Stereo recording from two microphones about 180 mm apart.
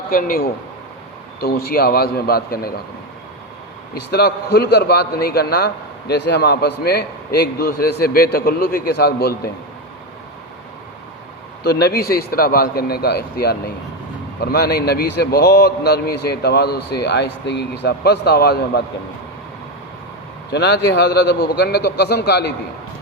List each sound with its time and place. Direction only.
0.1 s a man's voice: 50° left (ahead or behind)
4.1 s a man's voice: 65° left (ahead or behind)
11.6 s a man's voice: 60° left (ahead or behind)
20.5 s a man's voice: 65° left (ahead or behind)